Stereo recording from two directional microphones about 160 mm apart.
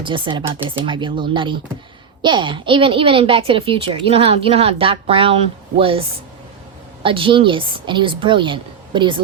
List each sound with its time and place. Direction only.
0.0 s speech: 30° right (ahead or behind)